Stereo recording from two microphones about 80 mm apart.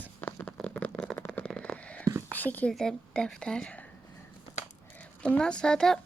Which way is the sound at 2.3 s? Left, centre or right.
Left.